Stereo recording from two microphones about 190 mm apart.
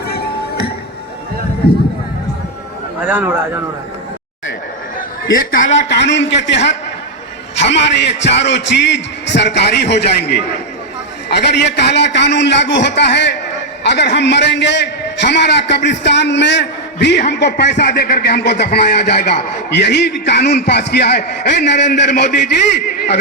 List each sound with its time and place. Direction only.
3.0 s speech: 10° right (ahead or behind)
5.6 s a man's voice: 70° left (ahead or behind)
7.5 s a sound: 70° left (ahead or behind)
8.2 s a man's voice: 65° left (ahead or behind)